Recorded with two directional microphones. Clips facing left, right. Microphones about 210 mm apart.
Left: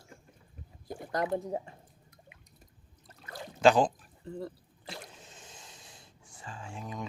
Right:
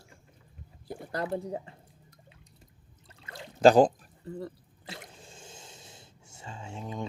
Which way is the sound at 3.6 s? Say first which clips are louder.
Right 4 dB; 40° right (ahead or behind).